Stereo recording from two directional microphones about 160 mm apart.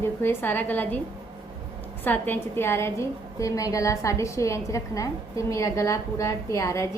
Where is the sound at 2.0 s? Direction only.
10° left (ahead or behind).